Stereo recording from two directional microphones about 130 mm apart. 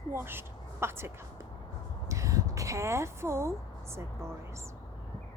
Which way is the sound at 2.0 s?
25° right (ahead or behind).